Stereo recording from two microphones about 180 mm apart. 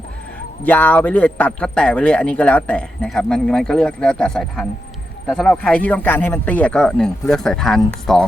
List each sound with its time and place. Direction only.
0.6 s a man's voice: 10° left (ahead or behind)